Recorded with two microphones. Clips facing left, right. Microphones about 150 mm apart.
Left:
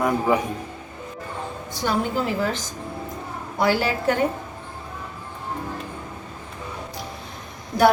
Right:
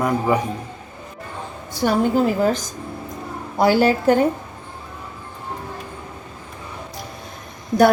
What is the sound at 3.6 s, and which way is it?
Speech, 45° right (ahead or behind).